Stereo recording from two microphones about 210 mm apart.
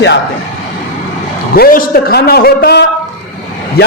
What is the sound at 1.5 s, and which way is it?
A man's voice, 45° left (ahead or behind).